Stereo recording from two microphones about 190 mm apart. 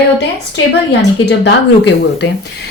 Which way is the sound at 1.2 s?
65° left (ahead or behind).